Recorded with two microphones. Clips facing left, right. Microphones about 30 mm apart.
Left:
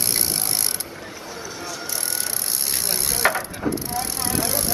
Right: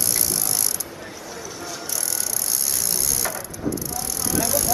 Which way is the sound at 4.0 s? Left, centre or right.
Left.